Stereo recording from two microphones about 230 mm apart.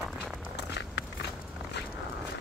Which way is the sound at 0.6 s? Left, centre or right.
Left.